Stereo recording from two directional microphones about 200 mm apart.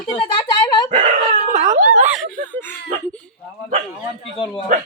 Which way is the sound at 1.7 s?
40° right (ahead or behind).